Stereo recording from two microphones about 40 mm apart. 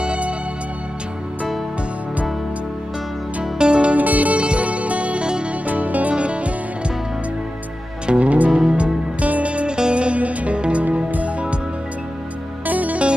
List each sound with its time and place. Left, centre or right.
0.0 s music: right
3.5 s music: right
3.9 s music: right
6.1 s music: right
8.1 s music: right
12.6 s music: right